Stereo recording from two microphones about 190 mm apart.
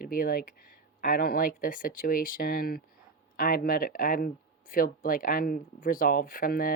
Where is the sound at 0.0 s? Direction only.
50° left (ahead or behind).